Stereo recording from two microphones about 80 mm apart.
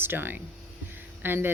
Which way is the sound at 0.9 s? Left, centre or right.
Right.